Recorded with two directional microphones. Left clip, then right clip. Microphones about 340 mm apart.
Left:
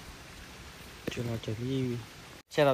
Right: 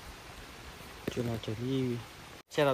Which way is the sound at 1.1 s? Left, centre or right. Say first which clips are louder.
Right 1 dB; centre.